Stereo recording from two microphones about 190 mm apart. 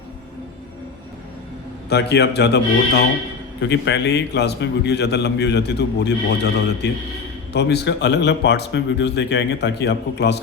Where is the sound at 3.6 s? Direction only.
65° left (ahead or behind).